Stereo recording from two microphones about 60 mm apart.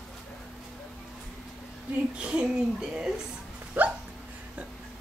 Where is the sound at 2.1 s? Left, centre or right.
Centre.